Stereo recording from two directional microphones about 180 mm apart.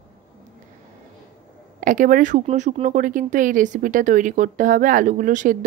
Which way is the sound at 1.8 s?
50° right (ahead or behind).